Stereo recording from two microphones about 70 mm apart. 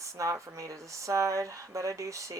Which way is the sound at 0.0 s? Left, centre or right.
Right.